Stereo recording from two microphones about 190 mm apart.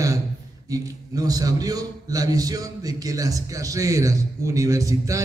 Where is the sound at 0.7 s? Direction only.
20° right (ahead or behind).